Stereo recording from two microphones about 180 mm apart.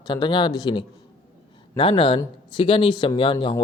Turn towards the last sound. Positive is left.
turn(degrees=25)  # may be behind; listen again after turning